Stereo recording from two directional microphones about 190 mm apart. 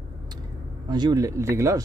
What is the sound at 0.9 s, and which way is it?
Speech, 20° right (ahead or behind).